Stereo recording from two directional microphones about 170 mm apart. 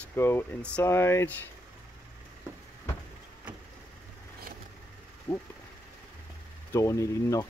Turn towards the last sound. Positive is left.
turn(degrees=20)  # may be behind; listen again after turning